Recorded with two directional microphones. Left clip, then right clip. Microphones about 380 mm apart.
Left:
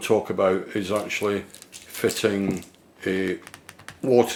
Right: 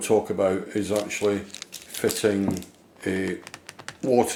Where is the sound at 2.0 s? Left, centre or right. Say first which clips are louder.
Left 1 dB; left.